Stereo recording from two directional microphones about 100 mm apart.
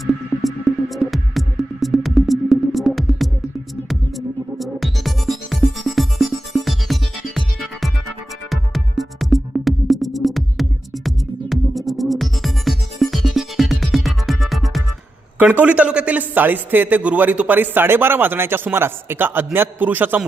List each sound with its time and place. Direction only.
0.1 s music: centre (ahead or behind)
4.5 s music: centre (ahead or behind)
15.4 s a man's voice: 15° right (ahead or behind)